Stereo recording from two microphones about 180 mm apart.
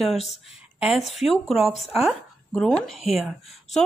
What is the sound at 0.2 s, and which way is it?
Speech, 35° left (ahead or behind).